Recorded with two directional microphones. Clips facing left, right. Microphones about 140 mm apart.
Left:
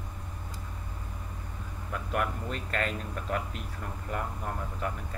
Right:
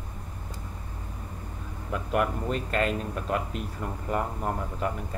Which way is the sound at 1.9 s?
20° right (ahead or behind).